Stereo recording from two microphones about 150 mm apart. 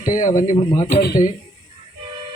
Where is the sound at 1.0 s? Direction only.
75° left (ahead or behind).